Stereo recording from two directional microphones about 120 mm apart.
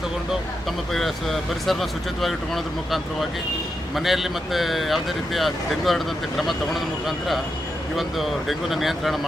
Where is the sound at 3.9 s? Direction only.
Centre (ahead or behind).